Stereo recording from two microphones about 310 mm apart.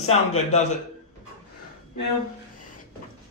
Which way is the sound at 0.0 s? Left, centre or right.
Left.